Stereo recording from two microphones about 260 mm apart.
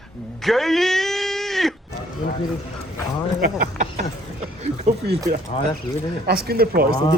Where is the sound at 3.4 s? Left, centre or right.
Right.